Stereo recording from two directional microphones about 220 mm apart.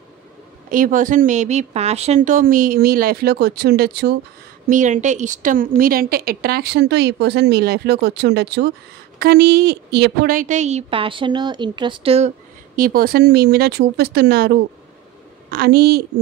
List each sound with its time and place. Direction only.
0.7 s speech: 40° right (ahead or behind)
4.6 s speech: 35° right (ahead or behind)
12.7 s speech: 40° right (ahead or behind)